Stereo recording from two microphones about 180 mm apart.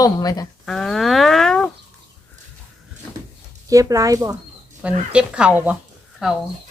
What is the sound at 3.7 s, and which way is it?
Speech, 20° right (ahead or behind).